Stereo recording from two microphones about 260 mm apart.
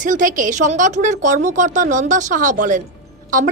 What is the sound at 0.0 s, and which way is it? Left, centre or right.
Speech, right.